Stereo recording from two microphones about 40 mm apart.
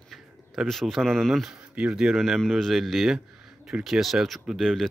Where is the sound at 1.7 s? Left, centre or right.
Right.